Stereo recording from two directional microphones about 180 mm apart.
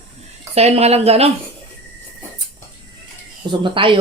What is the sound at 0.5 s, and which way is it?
Speech, 35° right (ahead or behind).